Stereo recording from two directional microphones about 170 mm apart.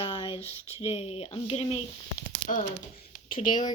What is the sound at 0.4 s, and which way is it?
Speech, 35° left (ahead or behind).